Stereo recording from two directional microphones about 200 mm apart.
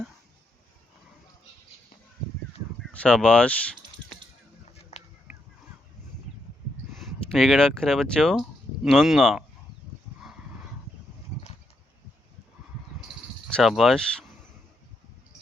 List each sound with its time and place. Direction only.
2.8 s speech: 5° left (ahead or behind)
4.9 s a sound: 35° left (ahead or behind)
7.0 s speech: centre (ahead or behind)
13.1 s cricket: centre (ahead or behind)